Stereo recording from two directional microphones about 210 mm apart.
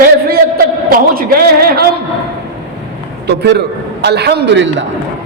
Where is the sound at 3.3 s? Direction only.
55° right (ahead or behind).